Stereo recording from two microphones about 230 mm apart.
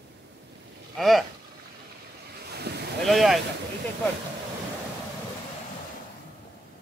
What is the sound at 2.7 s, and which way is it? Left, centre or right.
Boat, right.